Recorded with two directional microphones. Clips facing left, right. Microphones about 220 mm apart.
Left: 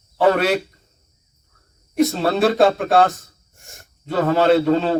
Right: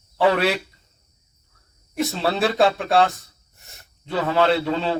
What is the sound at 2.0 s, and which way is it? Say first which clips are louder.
Speech: left 5 dB; 45° left (ahead or behind).